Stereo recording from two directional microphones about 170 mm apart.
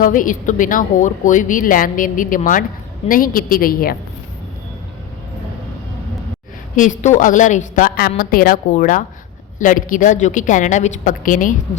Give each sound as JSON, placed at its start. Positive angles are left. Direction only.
{"t": 0.0, "sound": "a woman's voice", "side_deg": 55}
{"t": 6.7, "sound": "speech", "side_deg": 50}